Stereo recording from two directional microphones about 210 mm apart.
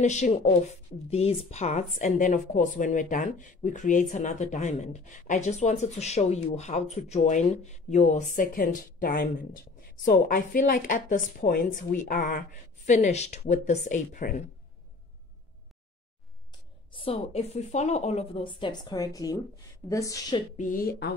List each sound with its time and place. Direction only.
0.0 s speech: 35° left (ahead or behind)
16.9 s a woman's voice: 25° left (ahead or behind)
20.5 s speech: 40° left (ahead or behind)